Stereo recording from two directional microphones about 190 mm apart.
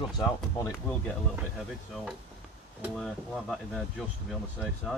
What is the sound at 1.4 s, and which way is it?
Speech, centre (ahead or behind).